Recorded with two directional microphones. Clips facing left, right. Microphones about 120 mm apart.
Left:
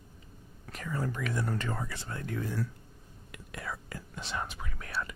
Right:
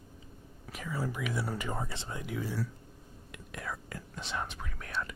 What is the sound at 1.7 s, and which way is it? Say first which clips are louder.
Speech: even; 25° right (ahead or behind).